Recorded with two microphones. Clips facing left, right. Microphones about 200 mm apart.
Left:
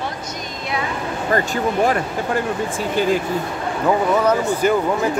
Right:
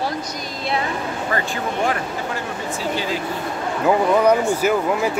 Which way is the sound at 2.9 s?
50° left (ahead or behind).